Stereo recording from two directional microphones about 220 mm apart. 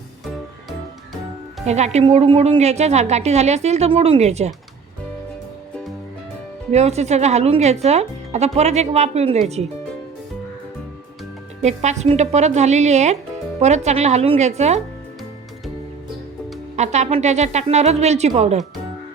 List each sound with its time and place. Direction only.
1.6 s a woman's voice: 30° right (ahead or behind)
6.7 s a woman's voice: 30° right (ahead or behind)
11.6 s speech: 30° right (ahead or behind)
16.7 s speech: 30° right (ahead or behind)